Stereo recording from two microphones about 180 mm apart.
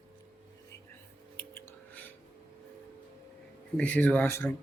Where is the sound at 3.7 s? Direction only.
10° left (ahead or behind).